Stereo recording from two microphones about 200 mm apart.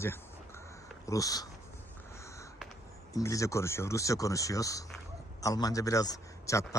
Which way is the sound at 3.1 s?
15° left (ahead or behind).